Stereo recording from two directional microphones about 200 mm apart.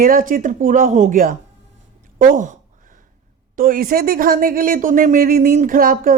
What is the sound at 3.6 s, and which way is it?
Speech, 45° right (ahead or behind).